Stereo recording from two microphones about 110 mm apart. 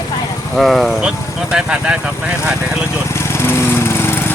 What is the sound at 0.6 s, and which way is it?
Speech, centre (ahead or behind).